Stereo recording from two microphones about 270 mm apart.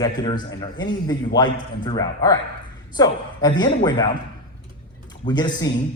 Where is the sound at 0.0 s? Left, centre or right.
Centre.